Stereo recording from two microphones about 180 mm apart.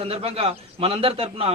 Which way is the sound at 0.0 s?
35° right (ahead or behind).